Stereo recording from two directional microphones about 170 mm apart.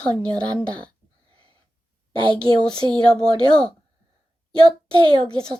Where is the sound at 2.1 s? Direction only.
30° right (ahead or behind).